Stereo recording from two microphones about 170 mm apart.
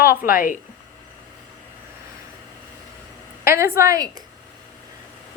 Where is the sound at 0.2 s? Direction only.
55° left (ahead or behind).